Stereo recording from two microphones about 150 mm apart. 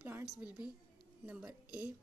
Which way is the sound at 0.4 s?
10° right (ahead or behind).